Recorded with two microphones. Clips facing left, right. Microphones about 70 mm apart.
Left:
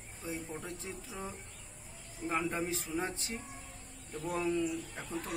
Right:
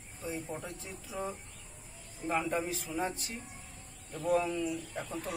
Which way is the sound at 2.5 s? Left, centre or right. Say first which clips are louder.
Right 1 dB; left.